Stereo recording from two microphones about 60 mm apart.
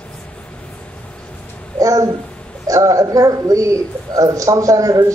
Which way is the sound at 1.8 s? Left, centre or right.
Right.